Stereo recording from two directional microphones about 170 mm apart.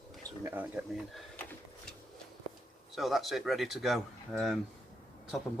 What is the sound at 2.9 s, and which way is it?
Speech, centre (ahead or behind).